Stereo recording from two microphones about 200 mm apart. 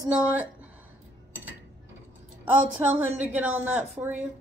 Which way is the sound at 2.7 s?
5° right (ahead or behind).